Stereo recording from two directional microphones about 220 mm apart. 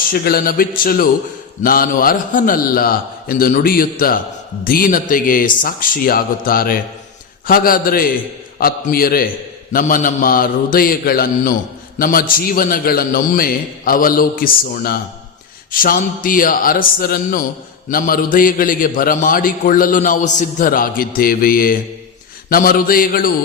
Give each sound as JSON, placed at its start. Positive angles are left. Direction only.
{"t": 0.1, "sound": "a man's voice", "side_deg": 40}